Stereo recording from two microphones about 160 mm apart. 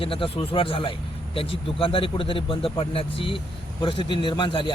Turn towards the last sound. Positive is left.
turn(degrees=30)  # may be behind; listen again after turning